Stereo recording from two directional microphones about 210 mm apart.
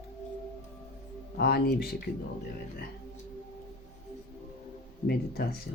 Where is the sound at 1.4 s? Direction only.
50° left (ahead or behind).